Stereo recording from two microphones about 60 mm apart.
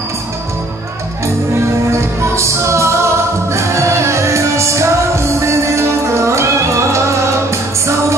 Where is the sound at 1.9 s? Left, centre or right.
Right.